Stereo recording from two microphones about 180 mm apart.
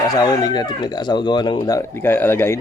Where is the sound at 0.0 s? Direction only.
20° left (ahead or behind).